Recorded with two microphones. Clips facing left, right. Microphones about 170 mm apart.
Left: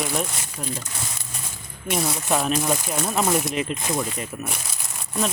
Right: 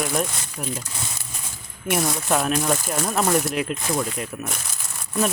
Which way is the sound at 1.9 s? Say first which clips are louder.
Right 1 dB; centre (ahead or behind).